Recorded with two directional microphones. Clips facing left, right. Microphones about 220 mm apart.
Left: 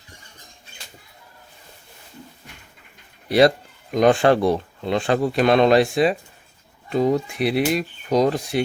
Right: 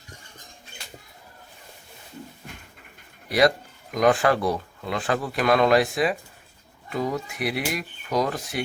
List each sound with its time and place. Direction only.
3.2 s speech: 30° left (ahead or behind)